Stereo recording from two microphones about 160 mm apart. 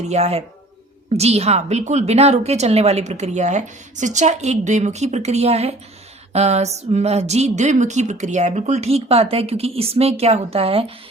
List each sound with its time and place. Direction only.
0.1 s a woman's voice: 40° right (ahead or behind)